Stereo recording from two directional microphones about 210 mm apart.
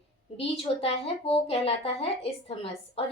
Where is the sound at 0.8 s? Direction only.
25° left (ahead or behind).